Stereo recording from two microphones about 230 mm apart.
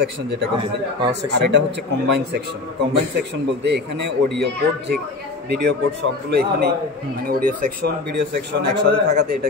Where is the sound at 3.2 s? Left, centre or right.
Right.